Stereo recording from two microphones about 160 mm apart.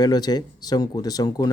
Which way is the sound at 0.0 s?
25° left (ahead or behind).